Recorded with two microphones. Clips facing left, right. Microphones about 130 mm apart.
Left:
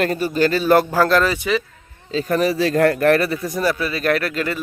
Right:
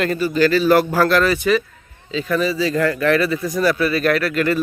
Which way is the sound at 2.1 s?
40° left (ahead or behind).